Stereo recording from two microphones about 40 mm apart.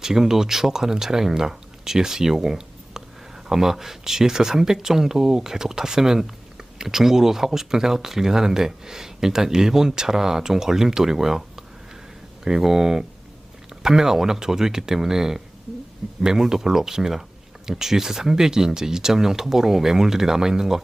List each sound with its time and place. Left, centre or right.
0.0 s speech: centre